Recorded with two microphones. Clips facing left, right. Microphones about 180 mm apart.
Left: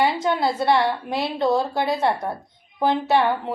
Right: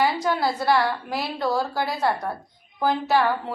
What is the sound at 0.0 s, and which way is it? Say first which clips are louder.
A woman's voice: left 2 dB; 25° left (ahead or behind).